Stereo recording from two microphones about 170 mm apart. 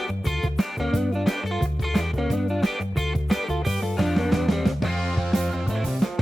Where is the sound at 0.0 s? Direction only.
Centre (ahead or behind).